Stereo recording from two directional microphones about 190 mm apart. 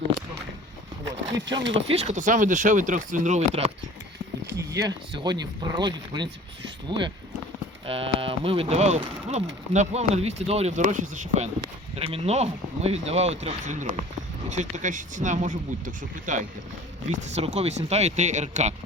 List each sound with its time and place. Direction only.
1.2 s speech: 70° right (ahead or behind)
1.9 s speech: 35° right (ahead or behind)
4.4 s speech: 15° right (ahead or behind); by 9.0 s 35° right (ahead or behind)
9.0 s speech: 25° right (ahead or behind)